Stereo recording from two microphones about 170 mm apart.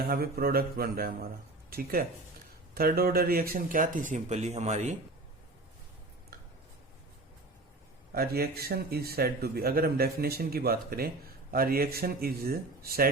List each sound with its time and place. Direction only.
0.0 s speech: 60° right (ahead or behind); by 4.9 s 45° right (ahead or behind)
8.1 s speech: 65° right (ahead or behind)